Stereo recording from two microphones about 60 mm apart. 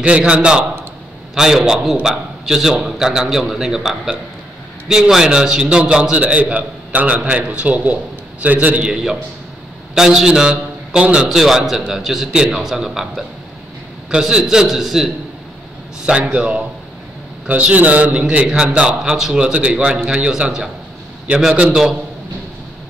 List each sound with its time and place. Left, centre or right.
0.0 s a man's voice: centre
8.9 s a man's voice: centre
16.1 s a man's voice: centre